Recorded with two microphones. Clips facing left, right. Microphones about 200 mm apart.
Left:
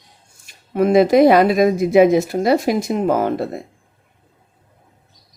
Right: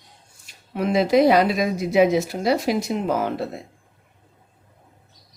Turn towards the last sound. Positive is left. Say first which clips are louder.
# left 5 dB
turn(degrees=50)  # may be behind; listen again after turning